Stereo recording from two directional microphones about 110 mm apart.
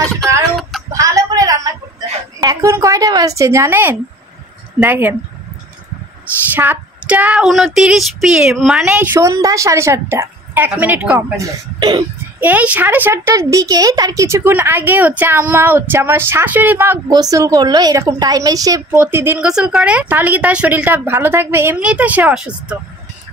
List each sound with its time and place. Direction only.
0.6 s a sound: centre (ahead or behind)
0.9 s a sound: 30° right (ahead or behind)
2.4 s a woman's voice: 30° right (ahead or behind)
6.5 s speech: 20° right (ahead or behind)
7.4 s speech: centre (ahead or behind)
8.9 s a woman's voice: 15° right (ahead or behind)
9.2 s a woman's voice: 30° right (ahead or behind); by 11.1 s 15° right (ahead or behind)
11.3 s a woman's voice: 40° right (ahead or behind)
12.4 s a woman's voice: 15° right (ahead or behind)
13.3 s a woman's voice: 30° right (ahead or behind)
18.9 s a woman's voice: 20° right (ahead or behind)
19.4 s a woman's voice: 5° right (ahead or behind)